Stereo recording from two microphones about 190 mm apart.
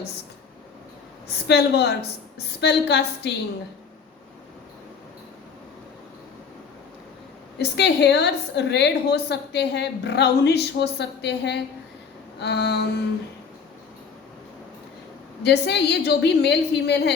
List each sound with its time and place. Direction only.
1.3 s a woman's voice: 60° left (ahead or behind)
7.6 s a woman's voice: 60° left (ahead or behind)
15.4 s a woman's voice: 65° left (ahead or behind)